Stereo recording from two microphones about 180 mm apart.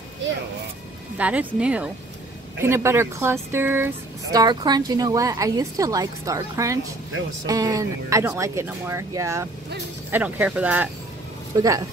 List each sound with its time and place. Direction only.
1.1 s a woman's voice: 10° right (ahead or behind)
11.5 s speech: 20° right (ahead or behind)